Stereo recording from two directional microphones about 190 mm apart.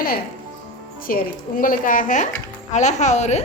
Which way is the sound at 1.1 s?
50° left (ahead or behind).